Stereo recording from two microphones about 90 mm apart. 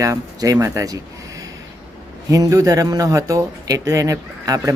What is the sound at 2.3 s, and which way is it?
Speech, 40° right (ahead or behind).